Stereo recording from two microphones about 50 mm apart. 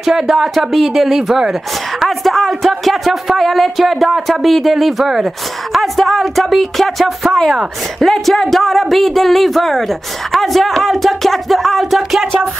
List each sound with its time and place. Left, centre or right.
0.0 s speech: centre
2.0 s speech: centre